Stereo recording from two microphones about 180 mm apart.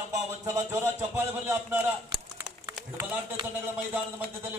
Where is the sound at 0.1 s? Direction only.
15° right (ahead or behind).